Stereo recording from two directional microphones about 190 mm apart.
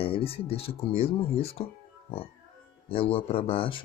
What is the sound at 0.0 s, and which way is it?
Speech, 30° left (ahead or behind).